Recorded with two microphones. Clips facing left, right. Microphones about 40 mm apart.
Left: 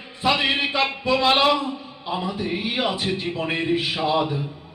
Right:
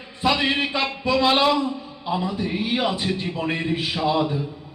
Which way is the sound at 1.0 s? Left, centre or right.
Centre.